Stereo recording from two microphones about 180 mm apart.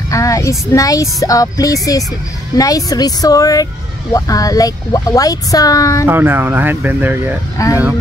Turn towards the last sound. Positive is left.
turn(degrees=20)  # may be behind; listen again after turning